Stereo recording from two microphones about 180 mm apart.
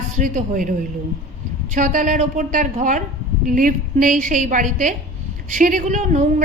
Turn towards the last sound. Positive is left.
turn(degrees=-45)  # may be behind; listen again after turning